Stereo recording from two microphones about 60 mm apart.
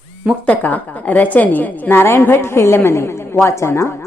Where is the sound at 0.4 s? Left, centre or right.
Left.